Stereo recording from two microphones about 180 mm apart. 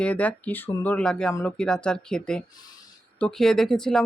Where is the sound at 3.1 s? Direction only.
5° left (ahead or behind).